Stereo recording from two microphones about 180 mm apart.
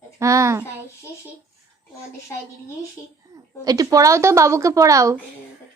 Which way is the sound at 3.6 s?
20° right (ahead or behind).